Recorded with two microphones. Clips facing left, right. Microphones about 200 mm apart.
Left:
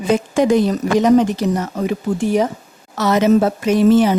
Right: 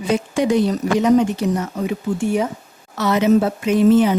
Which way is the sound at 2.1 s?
90° left.